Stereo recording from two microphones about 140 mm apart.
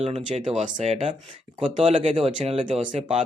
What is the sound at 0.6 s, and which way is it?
Speech, 55° right (ahead or behind).